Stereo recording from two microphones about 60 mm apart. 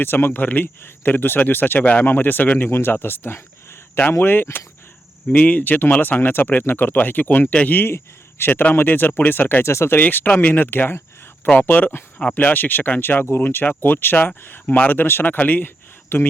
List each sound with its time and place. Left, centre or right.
0.0 s speech: left
2.6 s speech: left
7.8 s speech: left
9.6 s speech: left
10.0 s speech: left